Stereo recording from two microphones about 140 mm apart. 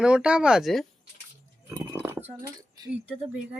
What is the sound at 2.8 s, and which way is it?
Speech, 30° right (ahead or behind).